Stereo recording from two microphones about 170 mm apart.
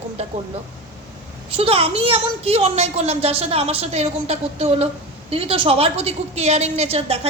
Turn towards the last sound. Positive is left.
turn(degrees=-35)  # may be behind; listen again after turning